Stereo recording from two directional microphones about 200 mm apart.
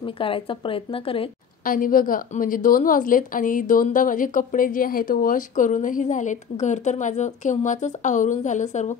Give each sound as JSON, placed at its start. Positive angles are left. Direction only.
{"t": 0.0, "sound": "speech", "side_deg": 25}
{"t": 1.6, "sound": "a woman's voice", "side_deg": 45}